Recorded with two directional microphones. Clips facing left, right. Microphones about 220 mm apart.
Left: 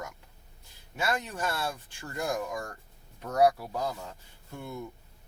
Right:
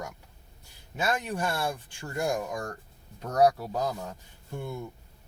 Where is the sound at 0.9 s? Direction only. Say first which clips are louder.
Right 2 dB; 15° right (ahead or behind).